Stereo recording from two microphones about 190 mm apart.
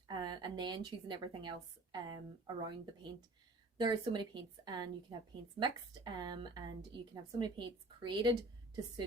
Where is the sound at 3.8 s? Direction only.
25° right (ahead or behind).